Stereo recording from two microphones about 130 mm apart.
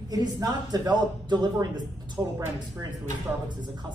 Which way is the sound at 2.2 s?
20° right (ahead or behind).